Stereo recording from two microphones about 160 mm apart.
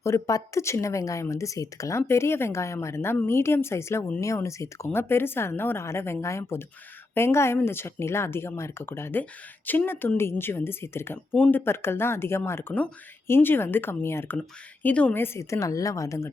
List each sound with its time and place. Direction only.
0.0 s a woman's voice: 20° left (ahead or behind)